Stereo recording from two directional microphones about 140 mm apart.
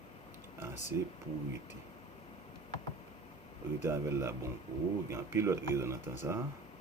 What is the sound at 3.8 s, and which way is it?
Speech, 20° right (ahead or behind).